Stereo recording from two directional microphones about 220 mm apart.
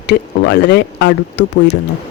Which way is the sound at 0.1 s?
50° left (ahead or behind).